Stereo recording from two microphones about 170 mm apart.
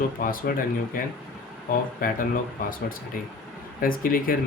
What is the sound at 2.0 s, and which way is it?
Speech, 55° left (ahead or behind).